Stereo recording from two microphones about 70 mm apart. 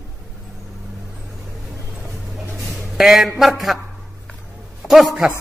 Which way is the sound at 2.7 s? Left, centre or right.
Centre.